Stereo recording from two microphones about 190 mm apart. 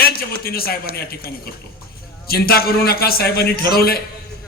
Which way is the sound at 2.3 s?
55° left (ahead or behind).